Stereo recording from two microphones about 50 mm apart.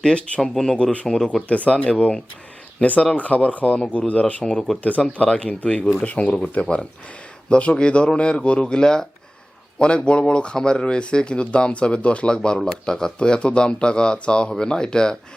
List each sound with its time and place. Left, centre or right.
0.0 s speech: centre
1.5 s speech: left
4.5 s speech: centre
4.8 s speech: left